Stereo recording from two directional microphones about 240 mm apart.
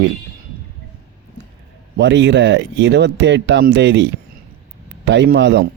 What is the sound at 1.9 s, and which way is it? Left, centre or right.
Speech, right.